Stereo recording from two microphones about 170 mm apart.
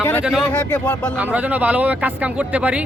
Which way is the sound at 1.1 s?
10° right (ahead or behind).